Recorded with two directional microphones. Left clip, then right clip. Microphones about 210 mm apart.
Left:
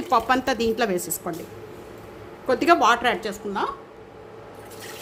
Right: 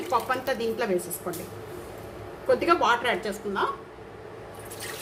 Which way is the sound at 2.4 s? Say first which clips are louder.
Left 4 dB; 50° left (ahead or behind).